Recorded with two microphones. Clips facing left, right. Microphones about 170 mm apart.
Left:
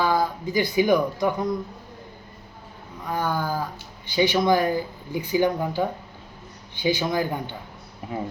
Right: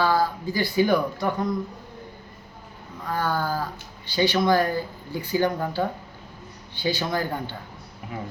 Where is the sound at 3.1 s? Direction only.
15° left (ahead or behind).